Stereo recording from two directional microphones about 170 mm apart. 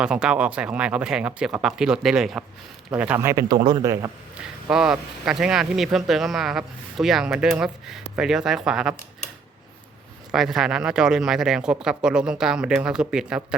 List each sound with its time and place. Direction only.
0.0 s speech: 5° right (ahead or behind)
3.6 s a man's voice: 30° right (ahead or behind)
4.4 s speech: 5° right (ahead or behind)
10.3 s speech: centre (ahead or behind)